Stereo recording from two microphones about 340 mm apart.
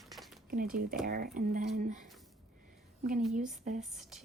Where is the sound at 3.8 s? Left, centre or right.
Centre.